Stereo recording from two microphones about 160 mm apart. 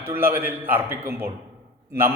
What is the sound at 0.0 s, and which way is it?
A man's voice, 15° right (ahead or behind).